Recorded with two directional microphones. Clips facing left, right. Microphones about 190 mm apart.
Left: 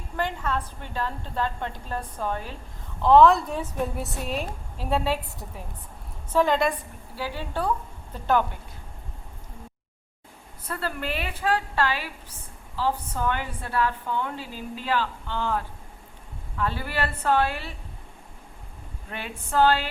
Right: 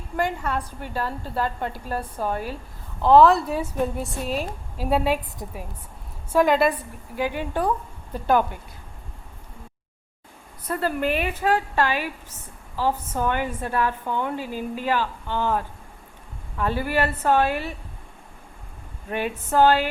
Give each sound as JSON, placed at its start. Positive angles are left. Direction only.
{"t": 0.2, "sound": "a woman's voice", "side_deg": -10}
{"t": 10.7, "sound": "a woman's voice", "side_deg": -15}
{"t": 19.1, "sound": "a woman's voice", "side_deg": -15}